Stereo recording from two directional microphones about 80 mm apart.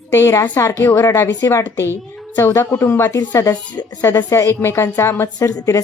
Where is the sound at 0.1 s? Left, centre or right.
Left.